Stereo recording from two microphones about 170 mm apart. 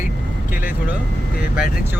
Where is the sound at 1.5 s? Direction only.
5° right (ahead or behind).